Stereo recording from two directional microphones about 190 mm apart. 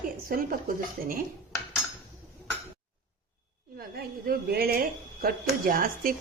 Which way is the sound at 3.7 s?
55° right (ahead or behind).